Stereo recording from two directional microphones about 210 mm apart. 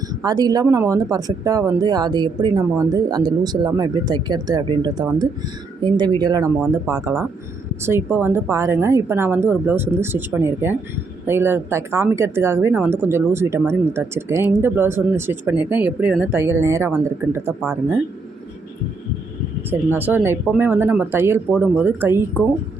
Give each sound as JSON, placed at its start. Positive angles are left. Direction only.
{"t": 0.2, "sound": "a woman's voice", "side_deg": -20}
{"t": 19.9, "sound": "a woman's voice", "side_deg": -10}